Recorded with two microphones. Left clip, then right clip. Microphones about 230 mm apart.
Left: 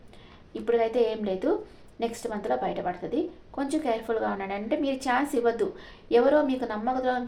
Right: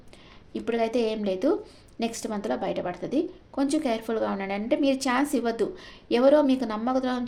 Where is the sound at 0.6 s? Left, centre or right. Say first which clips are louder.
Left 2 dB; right.